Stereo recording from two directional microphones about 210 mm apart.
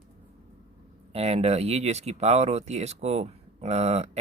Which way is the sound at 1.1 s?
30° right (ahead or behind).